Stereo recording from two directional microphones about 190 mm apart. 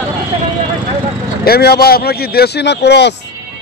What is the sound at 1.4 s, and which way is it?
Speech, 55° left (ahead or behind).